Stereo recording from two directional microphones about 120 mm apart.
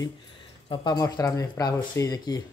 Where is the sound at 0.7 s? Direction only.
40° left (ahead or behind).